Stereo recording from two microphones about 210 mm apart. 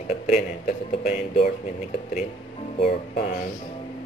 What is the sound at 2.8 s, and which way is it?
Speech, 30° left (ahead or behind).